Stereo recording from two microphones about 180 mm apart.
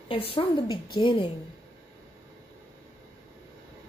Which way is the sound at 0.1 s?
30° left (ahead or behind).